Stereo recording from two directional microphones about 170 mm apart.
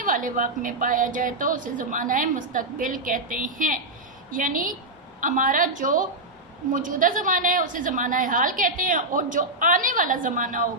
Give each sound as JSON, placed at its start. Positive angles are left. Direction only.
{"t": 0.0, "sound": "a woman's voice", "side_deg": -50}